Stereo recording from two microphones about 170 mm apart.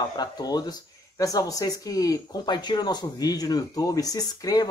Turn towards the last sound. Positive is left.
turn(degrees=20)  # may be behind; listen again after turning